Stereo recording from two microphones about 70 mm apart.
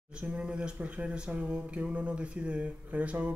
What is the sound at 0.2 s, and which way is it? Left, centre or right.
Speech, centre.